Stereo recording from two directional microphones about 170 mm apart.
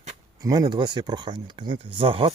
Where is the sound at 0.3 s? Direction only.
20° right (ahead or behind).